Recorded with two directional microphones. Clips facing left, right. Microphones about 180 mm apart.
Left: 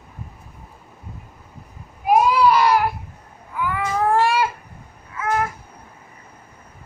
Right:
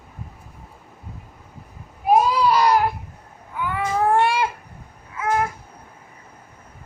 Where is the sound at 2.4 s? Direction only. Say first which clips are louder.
Left 2 dB; 20° right (ahead or behind).